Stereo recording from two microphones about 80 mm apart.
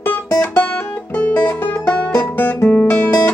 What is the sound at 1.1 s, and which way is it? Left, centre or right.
Music, left.